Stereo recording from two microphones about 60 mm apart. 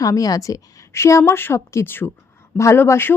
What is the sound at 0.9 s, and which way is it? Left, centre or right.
Speech, left.